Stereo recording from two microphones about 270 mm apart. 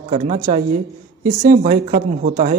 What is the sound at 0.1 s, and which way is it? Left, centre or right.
Speech, right.